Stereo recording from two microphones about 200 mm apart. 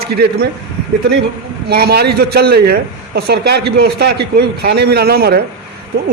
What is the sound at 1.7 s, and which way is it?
A man's voice, 50° right (ahead or behind).